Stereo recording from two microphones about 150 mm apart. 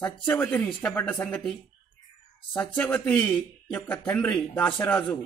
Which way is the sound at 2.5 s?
10° left (ahead or behind).